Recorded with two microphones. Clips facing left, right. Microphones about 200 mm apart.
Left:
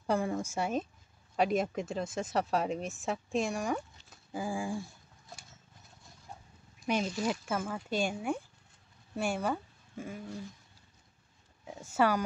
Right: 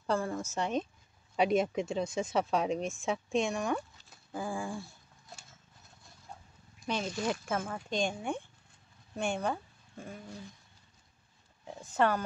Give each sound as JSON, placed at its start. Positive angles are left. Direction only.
{"t": 0.0, "sound": "speech", "side_deg": 15}
{"t": 6.9, "sound": "speech", "side_deg": 10}
{"t": 11.6, "sound": "speech", "side_deg": 10}